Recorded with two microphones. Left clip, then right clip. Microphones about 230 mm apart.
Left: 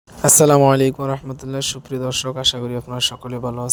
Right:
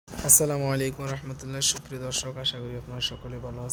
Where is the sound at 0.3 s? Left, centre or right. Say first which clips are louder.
Left 13 dB; left.